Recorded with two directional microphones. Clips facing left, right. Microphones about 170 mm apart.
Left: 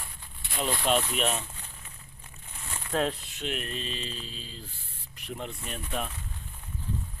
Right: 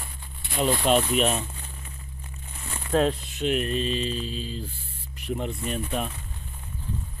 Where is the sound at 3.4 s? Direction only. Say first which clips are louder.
Right 9 dB; 15° right (ahead or behind).